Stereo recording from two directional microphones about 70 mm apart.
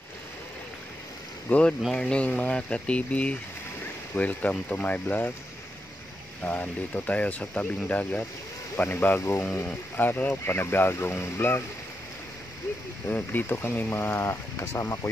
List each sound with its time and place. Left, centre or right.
1.5 s speech: centre
6.4 s speech: left
8.9 s speech: left
9.6 s speech: left
10.4 s speech: left
13.1 s speech: left